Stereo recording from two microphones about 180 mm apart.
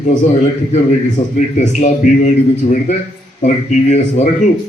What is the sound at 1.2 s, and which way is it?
A man's voice, 45° left (ahead or behind).